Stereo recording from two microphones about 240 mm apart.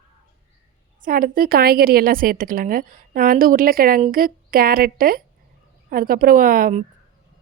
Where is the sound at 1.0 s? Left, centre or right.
Right.